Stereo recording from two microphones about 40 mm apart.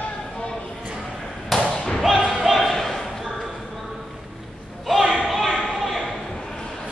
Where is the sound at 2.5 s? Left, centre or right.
Centre.